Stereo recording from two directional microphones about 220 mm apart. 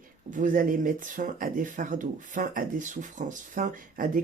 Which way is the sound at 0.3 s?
35° right (ahead or behind).